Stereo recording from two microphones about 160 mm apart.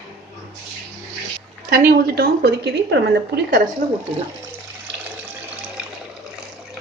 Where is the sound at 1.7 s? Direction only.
70° right (ahead or behind).